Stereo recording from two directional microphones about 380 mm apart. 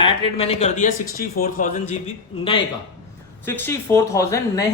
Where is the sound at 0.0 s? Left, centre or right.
Centre.